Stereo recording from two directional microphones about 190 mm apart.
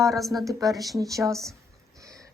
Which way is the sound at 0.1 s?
Centre (ahead or behind).